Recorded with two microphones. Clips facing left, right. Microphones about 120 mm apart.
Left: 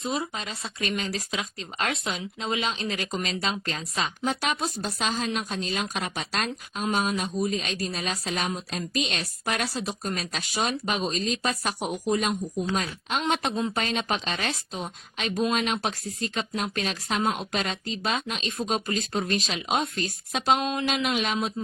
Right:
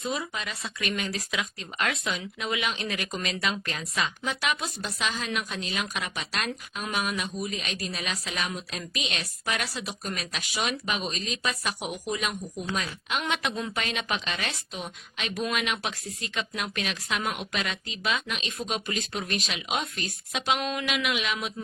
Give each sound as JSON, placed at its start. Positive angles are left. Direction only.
{"t": 0.0, "sound": "speech", "side_deg": 30}
{"t": 4.2, "sound": "speech", "side_deg": 45}
{"t": 20.6, "sound": "speech", "side_deg": 25}